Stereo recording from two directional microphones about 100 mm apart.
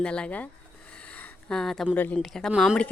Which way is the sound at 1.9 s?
15° left (ahead or behind).